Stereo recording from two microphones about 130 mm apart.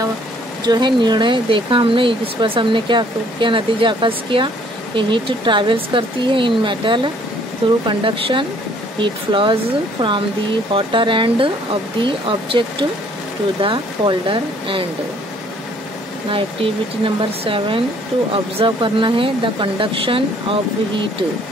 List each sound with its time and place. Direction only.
0.7 s speech: 35° right (ahead or behind)
17.0 s speech: 40° right (ahead or behind)